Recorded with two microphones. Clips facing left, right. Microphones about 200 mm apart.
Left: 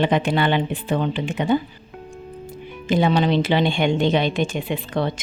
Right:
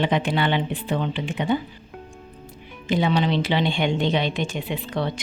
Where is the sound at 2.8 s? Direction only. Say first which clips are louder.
Left 3 dB; 45° left (ahead or behind).